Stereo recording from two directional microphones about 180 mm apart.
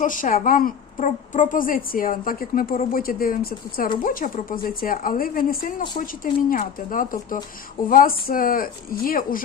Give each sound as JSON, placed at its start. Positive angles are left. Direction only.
{"t": 0.0, "sound": "a woman's voice", "side_deg": 50}